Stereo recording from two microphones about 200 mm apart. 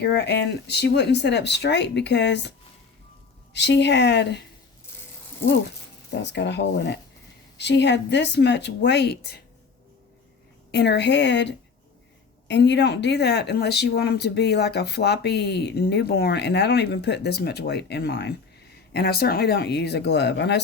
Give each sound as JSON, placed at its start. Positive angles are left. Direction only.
{"t": 0.0, "sound": "speech", "side_deg": 55}
{"t": 3.5, "sound": "speech", "side_deg": 60}
{"t": 6.1, "sound": "speech", "side_deg": 60}
{"t": 10.7, "sound": "speech", "side_deg": 55}